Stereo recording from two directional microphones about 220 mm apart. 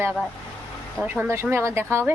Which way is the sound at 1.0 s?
10° right (ahead or behind).